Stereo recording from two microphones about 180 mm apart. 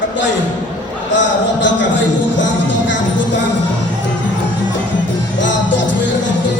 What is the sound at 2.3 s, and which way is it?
Music, 90° left.